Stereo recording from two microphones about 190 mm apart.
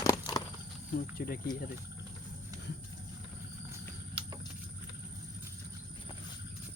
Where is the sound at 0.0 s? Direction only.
15° left (ahead or behind).